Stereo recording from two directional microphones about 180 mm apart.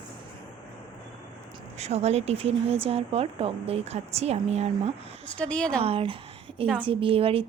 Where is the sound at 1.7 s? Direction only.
35° right (ahead or behind).